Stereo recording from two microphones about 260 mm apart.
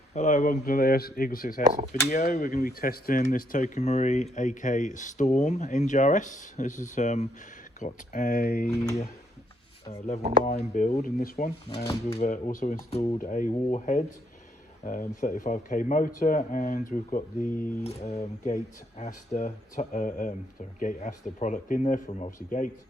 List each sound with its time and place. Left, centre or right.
0.1 s speech: left
10.4 s speech: left